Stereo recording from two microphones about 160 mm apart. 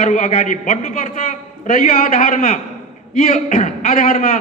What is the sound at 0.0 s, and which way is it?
A man's voice, 50° left (ahead or behind).